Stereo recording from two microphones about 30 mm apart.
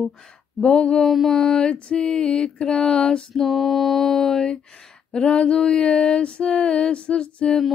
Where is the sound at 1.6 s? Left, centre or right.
Left.